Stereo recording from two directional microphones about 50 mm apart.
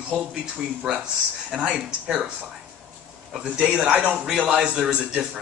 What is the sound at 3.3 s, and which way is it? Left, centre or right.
A man's voice, centre.